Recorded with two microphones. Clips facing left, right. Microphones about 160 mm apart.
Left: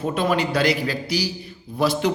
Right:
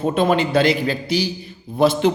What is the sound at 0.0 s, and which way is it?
A man's voice, 25° right (ahead or behind).